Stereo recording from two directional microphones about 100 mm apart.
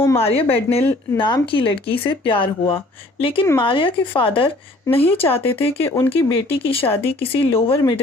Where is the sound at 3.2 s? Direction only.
65° left (ahead or behind).